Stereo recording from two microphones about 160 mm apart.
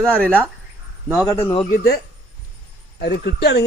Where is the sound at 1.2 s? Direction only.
35° left (ahead or behind).